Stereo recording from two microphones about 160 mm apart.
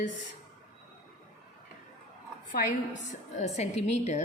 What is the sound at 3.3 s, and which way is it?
Speech, 45° left (ahead or behind).